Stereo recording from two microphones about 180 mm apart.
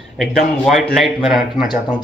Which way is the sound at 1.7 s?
25° left (ahead or behind).